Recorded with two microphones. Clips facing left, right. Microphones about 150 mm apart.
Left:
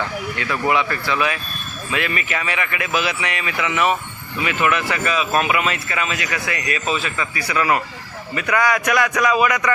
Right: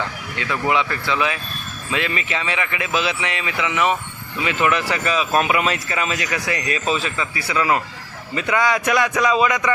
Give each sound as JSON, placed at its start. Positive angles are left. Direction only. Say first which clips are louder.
{"t": 0.7, "sound": "a man's voice", "louder": "even", "side_deg": -20}
{"t": 4.6, "sound": "a man's voice", "louder": "even", "side_deg": -35}